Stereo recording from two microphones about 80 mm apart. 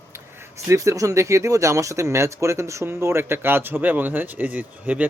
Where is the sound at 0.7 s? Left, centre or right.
Right.